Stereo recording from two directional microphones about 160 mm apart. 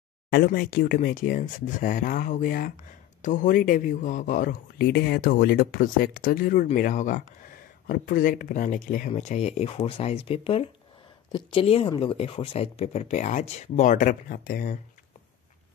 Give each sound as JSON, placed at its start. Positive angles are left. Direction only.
{"t": 0.3, "sound": "speech", "side_deg": 75}
{"t": 7.8, "sound": "speech", "side_deg": 65}